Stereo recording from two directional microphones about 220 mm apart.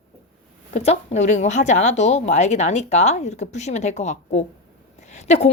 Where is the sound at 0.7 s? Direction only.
30° left (ahead or behind).